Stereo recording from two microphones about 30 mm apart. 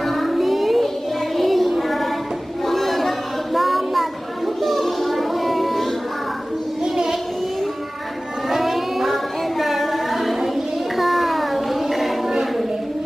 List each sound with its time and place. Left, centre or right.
0.0 s music: centre
1.4 s child singing: centre
6.8 s child singing: centre
8.4 s child singing: centre